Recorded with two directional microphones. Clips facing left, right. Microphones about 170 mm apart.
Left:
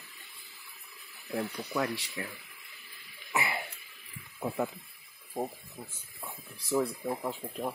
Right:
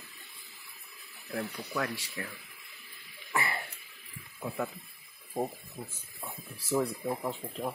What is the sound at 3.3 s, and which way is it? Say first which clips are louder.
Throat clearing: left 1 dB; 15° left (ahead or behind).